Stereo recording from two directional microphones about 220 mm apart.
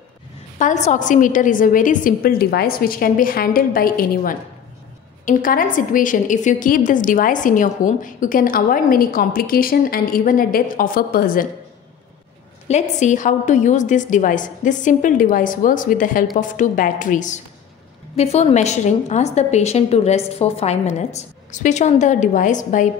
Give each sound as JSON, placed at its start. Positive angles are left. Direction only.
{"t": 0.6, "sound": "a woman's voice", "side_deg": 35}
{"t": 12.6, "sound": "a woman's voice", "side_deg": 30}